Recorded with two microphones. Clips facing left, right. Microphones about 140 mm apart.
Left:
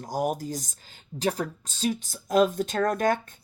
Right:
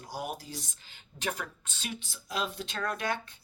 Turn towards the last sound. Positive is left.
turn(degrees=45)  # may be behind; listen again after turning